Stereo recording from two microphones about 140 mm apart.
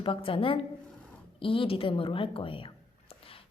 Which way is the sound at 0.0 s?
40° left (ahead or behind).